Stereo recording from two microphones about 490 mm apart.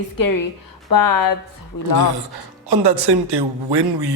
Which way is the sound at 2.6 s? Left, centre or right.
Right.